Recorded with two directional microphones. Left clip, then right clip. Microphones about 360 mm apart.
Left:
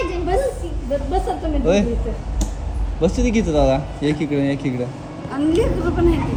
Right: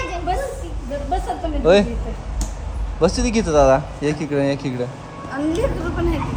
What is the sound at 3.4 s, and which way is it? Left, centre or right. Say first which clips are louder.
Speech: right 5 dB; centre.